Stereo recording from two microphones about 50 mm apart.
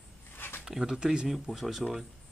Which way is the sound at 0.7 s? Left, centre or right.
Centre.